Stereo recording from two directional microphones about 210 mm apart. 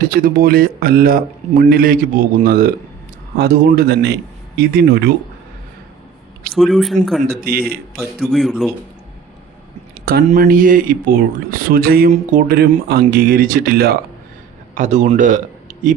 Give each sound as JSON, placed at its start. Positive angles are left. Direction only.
{"t": 0.0, "sound": "speech", "side_deg": -45}
{"t": 6.5, "sound": "speech", "side_deg": 0}
{"t": 7.3, "sound": "speech", "side_deg": -45}
{"t": 7.9, "sound": "speech", "side_deg": 0}
{"t": 10.1, "sound": "speech", "side_deg": -50}
{"t": 14.8, "sound": "speech", "side_deg": -35}